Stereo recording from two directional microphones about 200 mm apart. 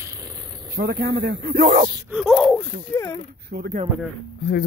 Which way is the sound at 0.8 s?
50° right (ahead or behind).